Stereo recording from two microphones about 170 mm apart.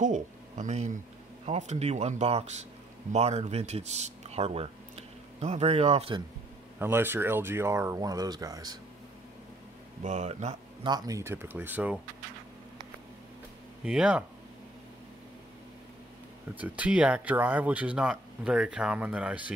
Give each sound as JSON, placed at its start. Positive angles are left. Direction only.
{"t": 0.0, "sound": "a sound", "side_deg": -45}
{"t": 1.4, "sound": "speech", "side_deg": -40}
{"t": 6.8, "sound": "speech", "side_deg": -15}
{"t": 10.0, "sound": "speech", "side_deg": -40}
{"t": 10.8, "sound": "speech", "side_deg": -25}
{"t": 13.8, "sound": "speech", "side_deg": -5}
{"t": 16.5, "sound": "speech", "side_deg": -10}